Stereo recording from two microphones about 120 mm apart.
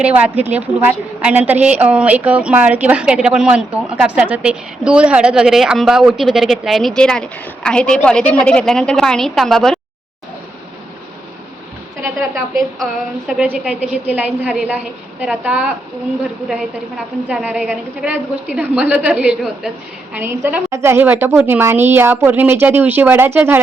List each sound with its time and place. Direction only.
0.0 s a woman's voice: 10° right (ahead or behind); by 9.8 s 5° left (ahead or behind)
12.3 s a woman's voice: centre (ahead or behind)
17.2 s a woman's voice: 10° right (ahead or behind)
20.1 s a woman's voice: 15° right (ahead or behind)